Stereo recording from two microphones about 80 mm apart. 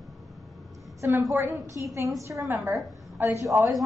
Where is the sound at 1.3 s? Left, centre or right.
Right.